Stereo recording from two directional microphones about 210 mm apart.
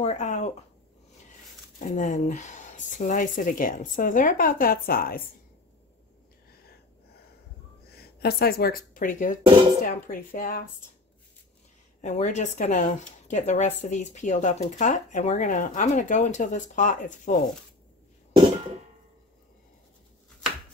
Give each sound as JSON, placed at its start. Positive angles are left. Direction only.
{"t": 0.0, "sound": "a sound", "side_deg": 35}
{"t": 1.8, "sound": "speech", "side_deg": 35}
{"t": 7.9, "sound": "speech", "side_deg": 50}
{"t": 12.0, "sound": "speech", "side_deg": 35}